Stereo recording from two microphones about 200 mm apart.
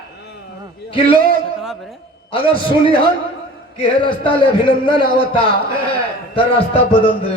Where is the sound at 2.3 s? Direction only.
25° left (ahead or behind).